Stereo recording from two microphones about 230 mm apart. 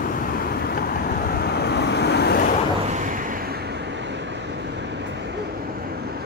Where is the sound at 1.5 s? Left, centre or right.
Left.